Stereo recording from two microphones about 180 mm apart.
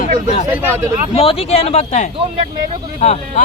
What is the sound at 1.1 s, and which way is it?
A man's voice, 30° left (ahead or behind).